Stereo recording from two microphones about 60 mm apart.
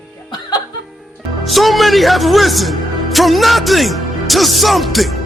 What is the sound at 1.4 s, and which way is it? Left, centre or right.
A man's voice, centre.